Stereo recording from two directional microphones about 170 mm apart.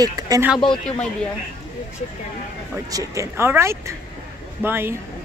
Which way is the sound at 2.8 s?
20° right (ahead or behind).